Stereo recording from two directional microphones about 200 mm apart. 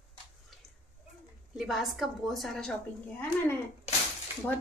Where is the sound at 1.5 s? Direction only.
Centre (ahead or behind).